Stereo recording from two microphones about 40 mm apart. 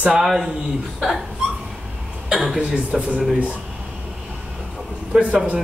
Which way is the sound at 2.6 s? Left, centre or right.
Right.